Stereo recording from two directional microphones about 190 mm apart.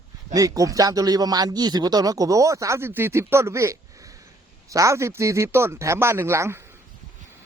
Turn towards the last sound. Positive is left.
turn(degrees=-15)  # may be behind; listen again after turning